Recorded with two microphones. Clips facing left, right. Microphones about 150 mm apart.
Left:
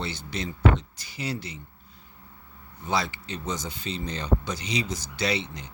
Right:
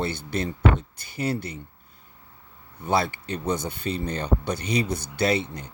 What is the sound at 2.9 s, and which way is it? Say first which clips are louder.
Speech: right 4 dB; 55° right (ahead or behind).